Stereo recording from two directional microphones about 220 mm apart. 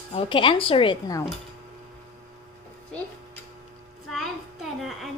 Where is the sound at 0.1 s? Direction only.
25° left (ahead or behind).